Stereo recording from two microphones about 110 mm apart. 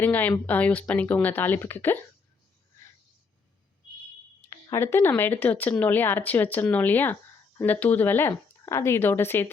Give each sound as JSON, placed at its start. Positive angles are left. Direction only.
{"t": 0.0, "sound": "speech", "side_deg": 15}
{"t": 4.4, "sound": "speech", "side_deg": 25}